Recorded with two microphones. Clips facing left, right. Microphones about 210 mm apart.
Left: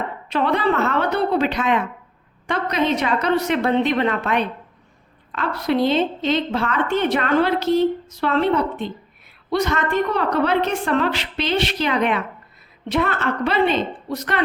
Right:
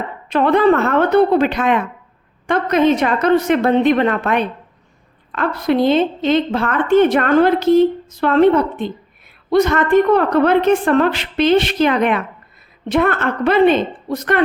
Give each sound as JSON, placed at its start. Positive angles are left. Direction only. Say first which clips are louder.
{"t": 0.3, "sound": "a woman's voice", "louder": "right 7 dB", "side_deg": -50}